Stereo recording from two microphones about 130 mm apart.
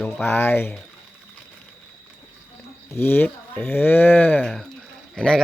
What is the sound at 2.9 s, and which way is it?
Speech, 20° left (ahead or behind).